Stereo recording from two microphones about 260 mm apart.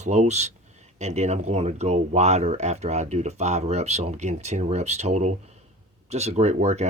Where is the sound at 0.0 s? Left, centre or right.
Right.